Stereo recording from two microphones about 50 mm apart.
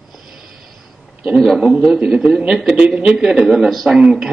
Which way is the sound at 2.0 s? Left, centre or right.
Centre.